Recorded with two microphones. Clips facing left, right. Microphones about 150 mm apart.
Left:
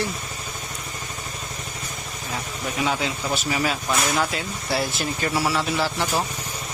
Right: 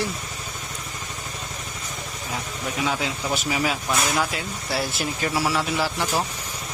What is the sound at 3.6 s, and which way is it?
Speech, 5° right (ahead or behind).